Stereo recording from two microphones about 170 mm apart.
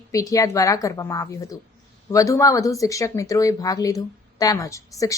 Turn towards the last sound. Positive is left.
turn(degrees=20)  # may be behind; listen again after turning